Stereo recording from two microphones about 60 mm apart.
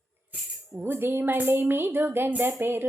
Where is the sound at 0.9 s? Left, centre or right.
Right.